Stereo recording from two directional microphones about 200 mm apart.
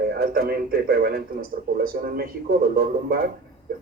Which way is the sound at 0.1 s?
50° right (ahead or behind).